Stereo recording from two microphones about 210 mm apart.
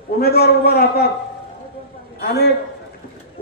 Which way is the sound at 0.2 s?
50° left (ahead or behind).